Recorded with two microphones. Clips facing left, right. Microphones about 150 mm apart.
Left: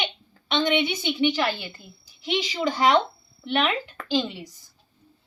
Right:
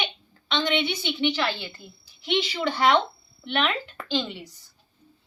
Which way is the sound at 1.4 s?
5° left (ahead or behind).